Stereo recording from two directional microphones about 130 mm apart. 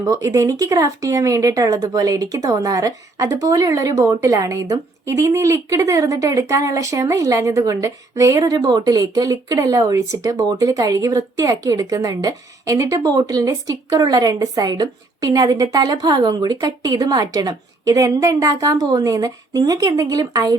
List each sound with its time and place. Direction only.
0.0 s a woman's voice: 25° right (ahead or behind)